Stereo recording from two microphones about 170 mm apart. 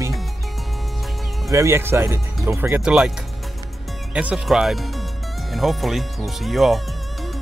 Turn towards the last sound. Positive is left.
turn(degrees=0)  # may be behind; listen again after turning